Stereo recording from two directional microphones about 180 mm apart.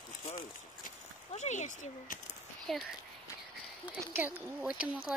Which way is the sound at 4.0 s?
10° right (ahead or behind).